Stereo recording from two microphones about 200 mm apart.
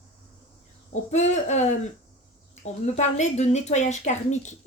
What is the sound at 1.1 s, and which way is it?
A woman's voice, 35° left (ahead or behind).